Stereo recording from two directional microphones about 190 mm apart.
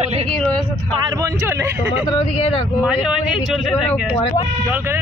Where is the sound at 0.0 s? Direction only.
35° right (ahead or behind).